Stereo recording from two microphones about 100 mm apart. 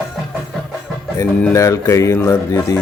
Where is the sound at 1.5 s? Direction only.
35° left (ahead or behind).